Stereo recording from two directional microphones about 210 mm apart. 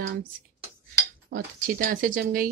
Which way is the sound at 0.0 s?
40° right (ahead or behind).